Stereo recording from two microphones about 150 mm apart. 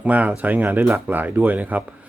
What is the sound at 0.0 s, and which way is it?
Speech, 10° right (ahead or behind).